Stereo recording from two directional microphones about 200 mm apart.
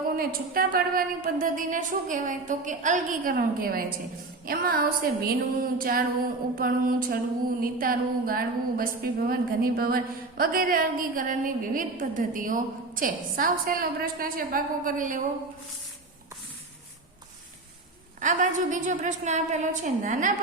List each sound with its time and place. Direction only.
0.2 s a woman's voice: 45° right (ahead or behind)
18.2 s a woman's voice: 40° right (ahead or behind)